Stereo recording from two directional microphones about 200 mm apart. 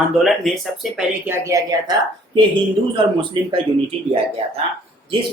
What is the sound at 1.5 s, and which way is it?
Speech, 15° right (ahead or behind).